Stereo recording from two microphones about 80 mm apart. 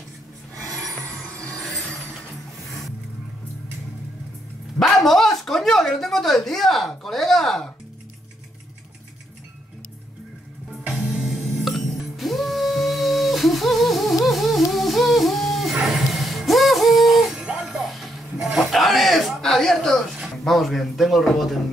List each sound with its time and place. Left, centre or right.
0.6 s filing: right
4.7 s speech: centre
10.8 s music: centre